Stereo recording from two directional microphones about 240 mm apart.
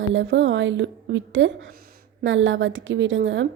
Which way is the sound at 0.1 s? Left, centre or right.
Right.